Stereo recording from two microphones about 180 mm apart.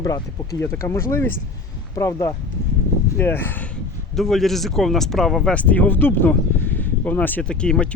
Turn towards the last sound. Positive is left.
turn(degrees=5)  # may be behind; listen again after turning